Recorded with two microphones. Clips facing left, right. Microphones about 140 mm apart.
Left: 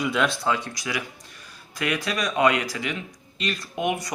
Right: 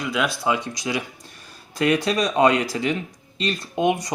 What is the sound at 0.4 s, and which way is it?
Speech, 15° right (ahead or behind).